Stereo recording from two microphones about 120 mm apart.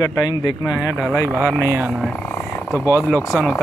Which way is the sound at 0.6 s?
10° right (ahead or behind).